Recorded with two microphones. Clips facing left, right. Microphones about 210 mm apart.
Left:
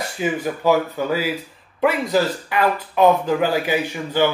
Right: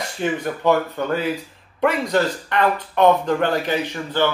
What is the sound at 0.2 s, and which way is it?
A man's voice, 5° left (ahead or behind).